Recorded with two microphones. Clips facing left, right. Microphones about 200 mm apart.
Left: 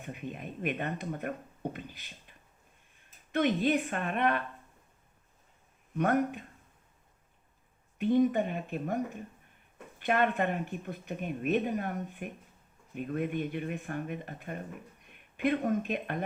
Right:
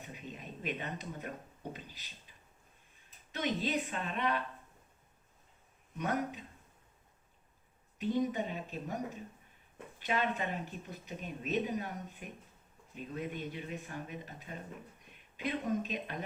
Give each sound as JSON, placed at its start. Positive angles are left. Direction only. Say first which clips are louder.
{"t": 0.0, "sound": "speech", "louder": "left 7 dB", "side_deg": 55}
{"t": 3.3, "sound": "speech", "louder": "left 7 dB", "side_deg": 55}
{"t": 6.0, "sound": "speech", "louder": "left 7 dB", "side_deg": 55}
{"t": 7.9, "sound": "speech", "louder": "left 7 dB", "side_deg": 55}